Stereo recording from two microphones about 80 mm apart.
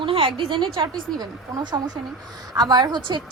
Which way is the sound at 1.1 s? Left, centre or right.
Right.